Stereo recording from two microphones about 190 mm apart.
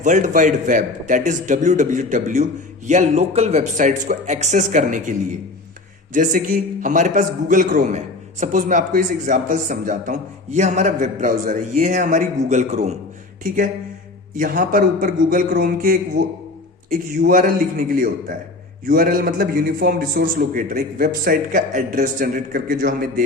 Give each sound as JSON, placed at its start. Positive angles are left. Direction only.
{"t": 0.0, "sound": "a man's voice", "side_deg": -40}
{"t": 6.1, "sound": "a man's voice", "side_deg": -45}
{"t": 14.3, "sound": "a man's voice", "side_deg": -45}